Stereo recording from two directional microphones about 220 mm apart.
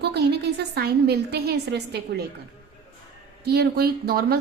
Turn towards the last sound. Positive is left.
turn(degrees=-45)  # may be behind; listen again after turning